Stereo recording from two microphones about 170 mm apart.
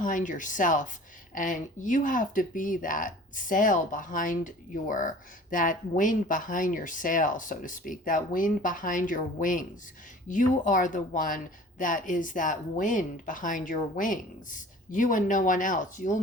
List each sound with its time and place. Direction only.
0.0 s speech: 50° left (ahead or behind)